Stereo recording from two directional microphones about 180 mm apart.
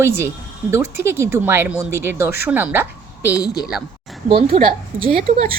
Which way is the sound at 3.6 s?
5° right (ahead or behind).